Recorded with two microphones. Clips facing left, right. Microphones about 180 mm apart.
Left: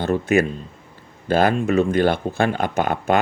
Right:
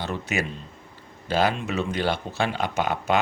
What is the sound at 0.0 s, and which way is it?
A man's voice, 50° left (ahead or behind).